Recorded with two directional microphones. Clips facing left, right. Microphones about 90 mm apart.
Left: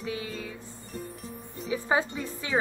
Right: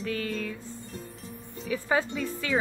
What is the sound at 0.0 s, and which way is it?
Music, 15° left (ahead or behind).